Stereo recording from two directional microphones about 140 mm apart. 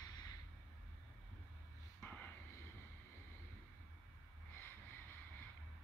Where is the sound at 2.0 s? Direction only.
10° left (ahead or behind).